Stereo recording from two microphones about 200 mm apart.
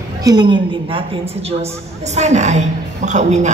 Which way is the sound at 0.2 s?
20° right (ahead or behind).